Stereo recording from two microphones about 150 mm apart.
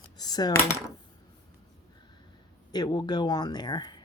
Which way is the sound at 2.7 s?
30° left (ahead or behind).